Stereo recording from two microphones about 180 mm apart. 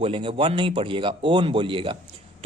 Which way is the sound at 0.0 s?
30° right (ahead or behind).